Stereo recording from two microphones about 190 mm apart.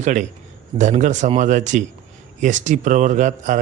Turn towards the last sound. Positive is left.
turn(degrees=-40)  # may be behind; listen again after turning